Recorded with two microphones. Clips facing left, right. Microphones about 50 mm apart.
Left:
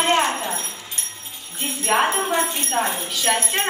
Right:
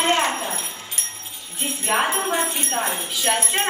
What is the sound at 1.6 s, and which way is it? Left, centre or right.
A woman's voice, centre.